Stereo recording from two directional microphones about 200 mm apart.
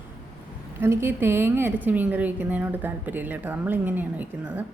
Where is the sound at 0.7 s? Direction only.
10° right (ahead or behind).